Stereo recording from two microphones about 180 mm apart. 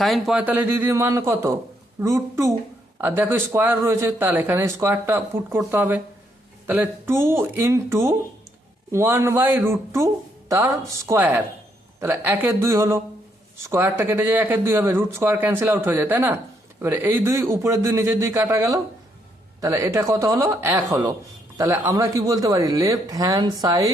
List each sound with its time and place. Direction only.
0.0 s speech: centre (ahead or behind); by 23.9 s 20° right (ahead or behind)